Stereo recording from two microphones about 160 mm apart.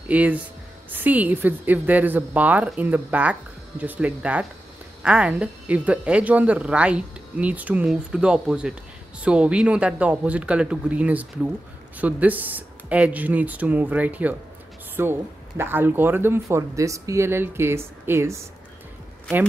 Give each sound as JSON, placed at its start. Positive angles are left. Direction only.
{"t": 0.1, "sound": "a woman's voice", "side_deg": -10}